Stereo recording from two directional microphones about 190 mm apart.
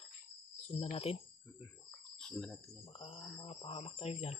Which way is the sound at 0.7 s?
30° left (ahead or behind).